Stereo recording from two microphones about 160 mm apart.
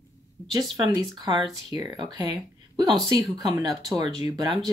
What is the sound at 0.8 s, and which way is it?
Speech, 25° right (ahead or behind).